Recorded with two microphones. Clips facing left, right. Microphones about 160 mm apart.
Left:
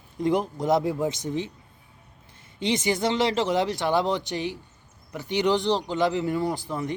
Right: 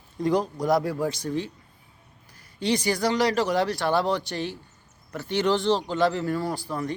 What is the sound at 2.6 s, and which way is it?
Speech, 20° left (ahead or behind).